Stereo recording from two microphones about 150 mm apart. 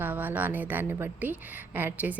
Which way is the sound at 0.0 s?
10° right (ahead or behind).